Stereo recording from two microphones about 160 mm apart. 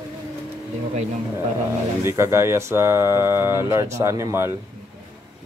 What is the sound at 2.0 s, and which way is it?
Speech, 15° right (ahead or behind).